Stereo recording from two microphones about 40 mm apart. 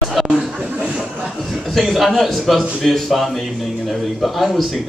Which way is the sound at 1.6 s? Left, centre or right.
Centre.